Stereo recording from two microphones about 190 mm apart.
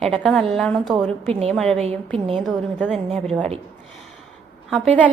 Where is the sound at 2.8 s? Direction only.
Centre (ahead or behind).